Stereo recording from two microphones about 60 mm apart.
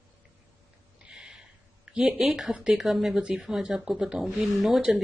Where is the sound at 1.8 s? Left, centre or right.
Centre.